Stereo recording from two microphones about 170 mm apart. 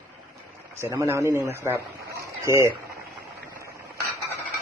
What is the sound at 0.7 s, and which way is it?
Speech, 15° right (ahead or behind).